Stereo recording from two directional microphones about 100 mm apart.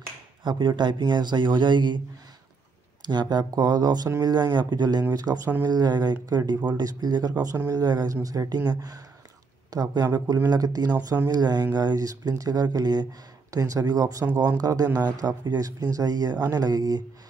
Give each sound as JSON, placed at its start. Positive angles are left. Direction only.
{"t": 0.4, "sound": "speech", "side_deg": -50}
{"t": 3.1, "sound": "speech", "side_deg": -45}
{"t": 7.5, "sound": "speech", "side_deg": -30}
{"t": 7.8, "sound": "speech", "side_deg": -40}